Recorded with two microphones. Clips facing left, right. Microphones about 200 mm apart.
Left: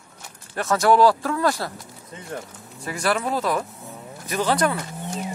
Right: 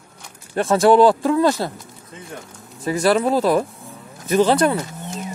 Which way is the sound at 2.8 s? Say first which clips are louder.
Right 7 dB; 25° right (ahead or behind).